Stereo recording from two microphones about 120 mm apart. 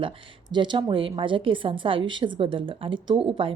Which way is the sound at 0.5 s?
40° right (ahead or behind).